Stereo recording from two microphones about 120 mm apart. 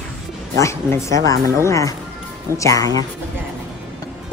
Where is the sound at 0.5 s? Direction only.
25° left (ahead or behind).